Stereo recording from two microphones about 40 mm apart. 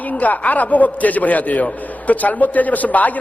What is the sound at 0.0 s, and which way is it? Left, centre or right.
A man's voice, left.